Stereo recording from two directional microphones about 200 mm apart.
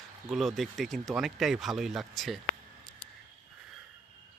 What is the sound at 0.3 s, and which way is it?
Speech, centre (ahead or behind).